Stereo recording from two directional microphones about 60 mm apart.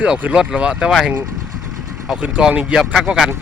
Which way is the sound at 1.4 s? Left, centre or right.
Centre.